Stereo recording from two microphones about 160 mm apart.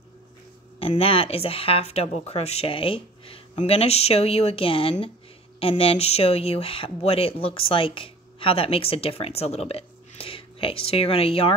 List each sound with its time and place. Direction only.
0.7 s speech: 35° left (ahead or behind)